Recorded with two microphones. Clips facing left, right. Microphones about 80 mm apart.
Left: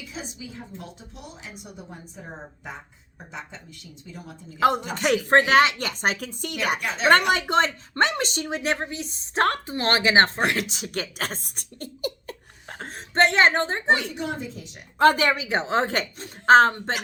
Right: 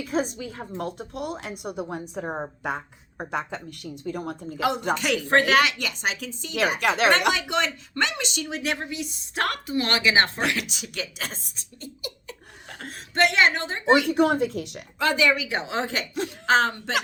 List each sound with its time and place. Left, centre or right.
0.0 s a woman's voice: right
4.9 s speech: left
6.7 s speech: right
7.3 s speech: left
12.6 s a woman's voice: left
14.1 s speech: right
14.9 s speech: left